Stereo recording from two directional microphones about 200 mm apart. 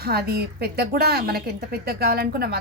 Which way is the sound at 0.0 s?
50° right (ahead or behind).